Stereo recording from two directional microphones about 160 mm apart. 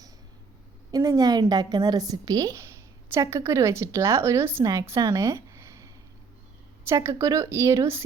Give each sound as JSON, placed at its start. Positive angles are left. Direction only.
{"t": 0.9, "sound": "a woman's voice", "side_deg": -25}